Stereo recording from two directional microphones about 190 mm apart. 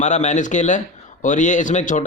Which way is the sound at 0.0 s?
40° left (ahead or behind).